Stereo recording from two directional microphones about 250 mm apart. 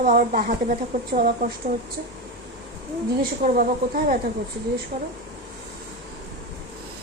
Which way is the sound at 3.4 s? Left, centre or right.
Right.